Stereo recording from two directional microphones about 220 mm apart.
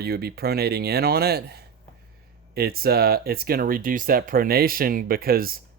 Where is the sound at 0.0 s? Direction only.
45° right (ahead or behind).